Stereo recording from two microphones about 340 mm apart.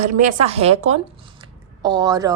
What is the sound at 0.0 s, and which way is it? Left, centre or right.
A woman's voice, right.